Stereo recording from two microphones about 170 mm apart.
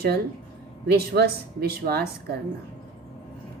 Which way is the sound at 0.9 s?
65° right (ahead or behind).